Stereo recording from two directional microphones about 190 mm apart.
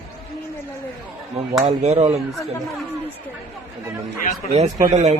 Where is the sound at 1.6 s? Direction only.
35° right (ahead or behind).